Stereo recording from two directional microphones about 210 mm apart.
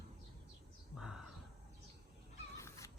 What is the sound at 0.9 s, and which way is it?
Crow, 5° right (ahead or behind).